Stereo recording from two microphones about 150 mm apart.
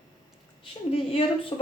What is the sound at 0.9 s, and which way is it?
Speech, 40° left (ahead or behind).